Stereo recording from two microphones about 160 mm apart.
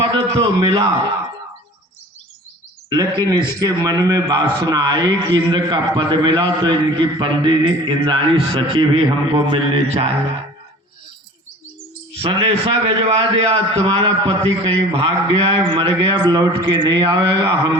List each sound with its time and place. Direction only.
0.3 s a man's voice: 30° right (ahead or behind)
3.2 s a man's voice: 25° right (ahead or behind)
12.1 s a man's voice: 35° right (ahead or behind)